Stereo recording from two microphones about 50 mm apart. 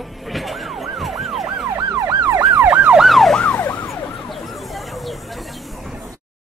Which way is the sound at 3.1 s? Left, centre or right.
Centre.